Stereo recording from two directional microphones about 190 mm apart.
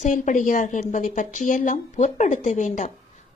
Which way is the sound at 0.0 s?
40° left (ahead or behind).